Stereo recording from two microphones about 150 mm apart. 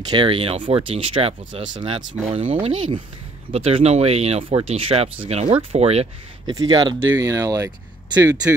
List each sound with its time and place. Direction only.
0.1 s speech: 35° right (ahead or behind)
6.4 s speech: 25° right (ahead or behind)